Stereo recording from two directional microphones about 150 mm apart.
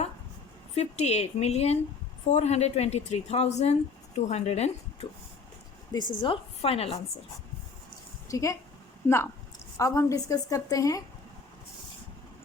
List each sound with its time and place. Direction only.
0.8 s a woman's voice: 45° left (ahead or behind)
5.9 s a woman's voice: 30° left (ahead or behind)
8.3 s a woman's voice: 20° left (ahead or behind)